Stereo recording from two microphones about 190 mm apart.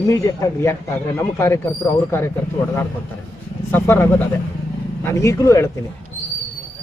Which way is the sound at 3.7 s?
10° left (ahead or behind).